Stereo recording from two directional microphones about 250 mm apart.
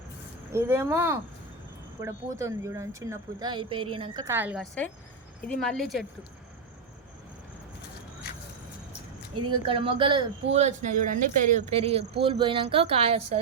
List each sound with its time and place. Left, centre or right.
0.5 s speech: centre
9.6 s speech: right